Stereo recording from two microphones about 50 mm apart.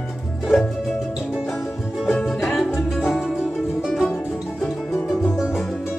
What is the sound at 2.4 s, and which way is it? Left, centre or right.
Music, centre.